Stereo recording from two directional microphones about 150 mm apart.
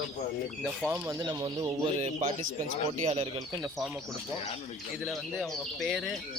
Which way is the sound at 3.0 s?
45° right (ahead or behind).